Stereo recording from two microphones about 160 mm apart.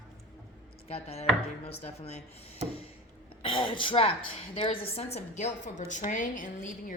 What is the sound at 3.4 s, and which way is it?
A woman's voice, 30° left (ahead or behind).